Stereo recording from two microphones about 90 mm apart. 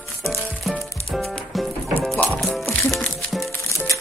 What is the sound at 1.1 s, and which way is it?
Music, centre (ahead or behind).